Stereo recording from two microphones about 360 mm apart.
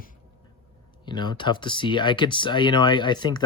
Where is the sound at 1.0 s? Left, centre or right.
Centre.